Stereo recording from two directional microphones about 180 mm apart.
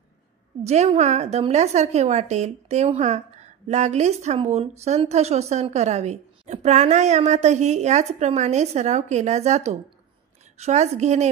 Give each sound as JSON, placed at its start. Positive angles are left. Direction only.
{"t": 0.7, "sound": "a woman's voice", "side_deg": -35}